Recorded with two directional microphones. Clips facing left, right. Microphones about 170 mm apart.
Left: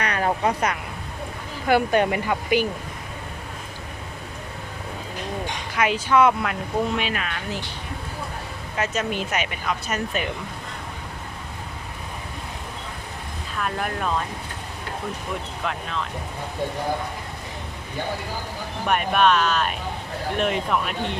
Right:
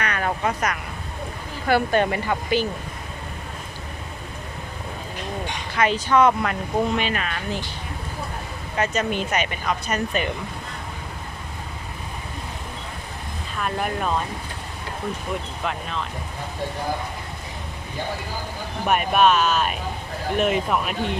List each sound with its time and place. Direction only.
0.0 s a sound: 30° left (ahead or behind)
1.6 s speech: 15° left (ahead or behind)
5.7 s speech: 10° left (ahead or behind)
8.7 s speech: centre (ahead or behind)
13.6 s speech: 5° right (ahead or behind)
15.6 s speech: centre (ahead or behind)
18.9 s speech: 10° right (ahead or behind)